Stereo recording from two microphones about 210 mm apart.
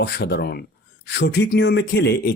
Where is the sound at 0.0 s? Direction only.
50° left (ahead or behind).